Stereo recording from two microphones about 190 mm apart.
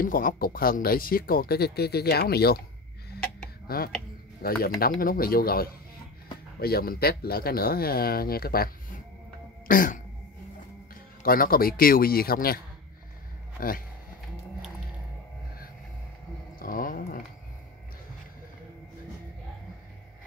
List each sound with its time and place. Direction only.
0.0 s speech: 45° left (ahead or behind)
3.6 s speech: 50° left (ahead or behind)
9.7 s music: 45° left (ahead or behind)
11.2 s speech: 50° left (ahead or behind)
16.5 s a sound: 45° left (ahead or behind)